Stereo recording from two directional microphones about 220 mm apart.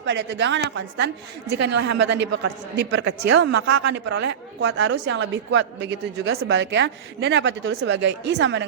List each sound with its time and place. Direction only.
0.0 s a woman's voice: 50° right (ahead or behind)